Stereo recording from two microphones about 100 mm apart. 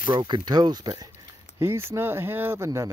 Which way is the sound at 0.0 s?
50° right (ahead or behind).